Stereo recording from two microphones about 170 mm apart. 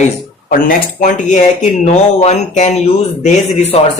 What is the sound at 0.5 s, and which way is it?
Speech, 55° left (ahead or behind).